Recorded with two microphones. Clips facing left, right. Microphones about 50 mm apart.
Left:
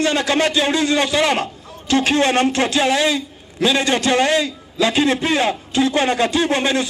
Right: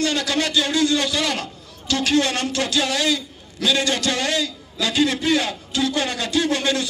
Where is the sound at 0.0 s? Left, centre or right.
Left.